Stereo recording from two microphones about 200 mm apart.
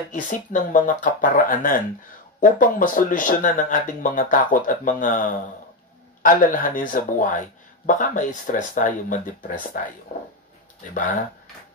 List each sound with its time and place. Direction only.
0.1 s speech: 40° left (ahead or behind)
6.2 s speech: 40° left (ahead or behind)